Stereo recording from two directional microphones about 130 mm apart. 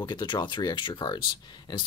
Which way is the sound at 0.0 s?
35° left (ahead or behind).